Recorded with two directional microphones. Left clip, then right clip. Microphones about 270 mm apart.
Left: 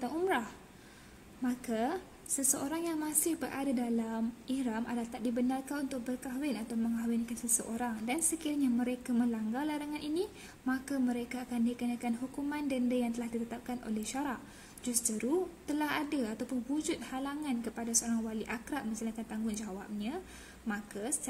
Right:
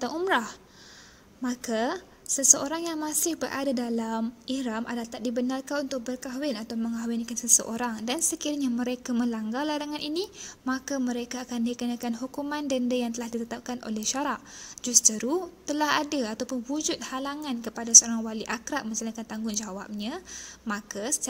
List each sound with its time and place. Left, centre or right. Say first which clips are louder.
0.0 s a woman's voice: right 7 dB; right